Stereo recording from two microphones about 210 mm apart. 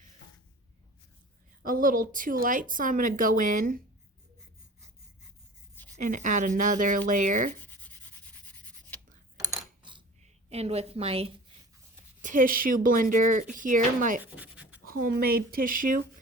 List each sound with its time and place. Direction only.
1.6 s speech: 40° right (ahead or behind)
6.0 s speech: 35° right (ahead or behind)
9.8 s a sound: 25° right (ahead or behind)
10.5 s a woman's voice: 30° right (ahead or behind)
12.2 s speech: 40° right (ahead or behind)
14.3 s a sound: 5° right (ahead or behind)
14.8 s speech: 45° right (ahead or behind)